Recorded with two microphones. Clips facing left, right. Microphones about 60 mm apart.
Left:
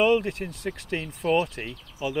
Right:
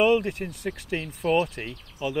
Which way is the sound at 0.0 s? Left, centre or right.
Centre.